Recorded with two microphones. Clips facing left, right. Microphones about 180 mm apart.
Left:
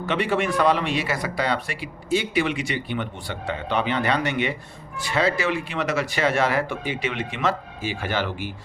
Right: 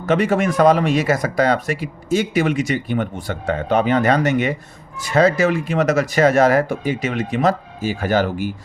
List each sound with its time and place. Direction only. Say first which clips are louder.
0.0 s speech: right 6 dB; 45° right (ahead or behind)